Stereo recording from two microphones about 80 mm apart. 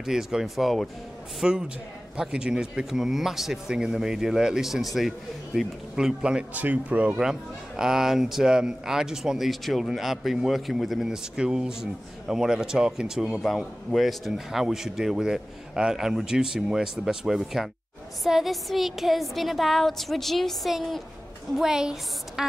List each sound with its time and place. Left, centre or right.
0.0 s a man's voice: centre